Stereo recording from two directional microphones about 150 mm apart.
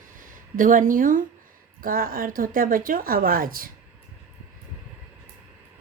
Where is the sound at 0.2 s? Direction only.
65° right (ahead or behind).